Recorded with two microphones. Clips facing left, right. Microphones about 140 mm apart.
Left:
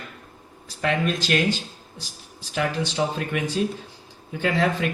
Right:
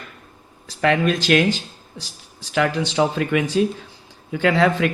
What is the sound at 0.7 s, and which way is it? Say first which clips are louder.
A man's voice: right 5 dB; 90° right.